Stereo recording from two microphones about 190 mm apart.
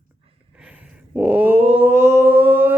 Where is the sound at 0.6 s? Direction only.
5° right (ahead or behind).